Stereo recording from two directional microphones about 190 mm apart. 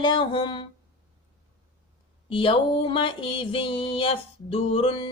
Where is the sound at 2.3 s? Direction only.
25° left (ahead or behind).